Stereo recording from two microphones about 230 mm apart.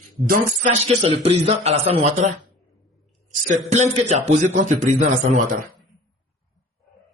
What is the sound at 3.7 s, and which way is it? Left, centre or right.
A man's voice, right.